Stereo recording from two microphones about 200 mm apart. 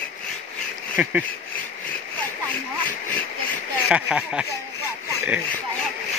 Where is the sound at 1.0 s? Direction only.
10° right (ahead or behind).